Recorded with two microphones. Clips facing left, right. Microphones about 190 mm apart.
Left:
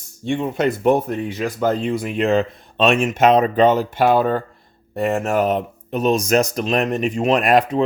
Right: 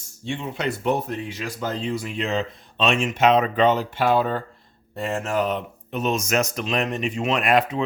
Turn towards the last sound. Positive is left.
turn(degrees=40)  # may be behind; listen again after turning